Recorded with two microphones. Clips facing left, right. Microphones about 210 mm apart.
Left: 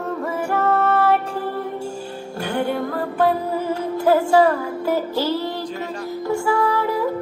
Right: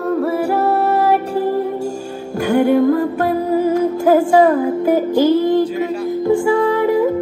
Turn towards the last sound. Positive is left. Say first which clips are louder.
# right 6 dB
turn(degrees=-20)  # may be behind; listen again after turning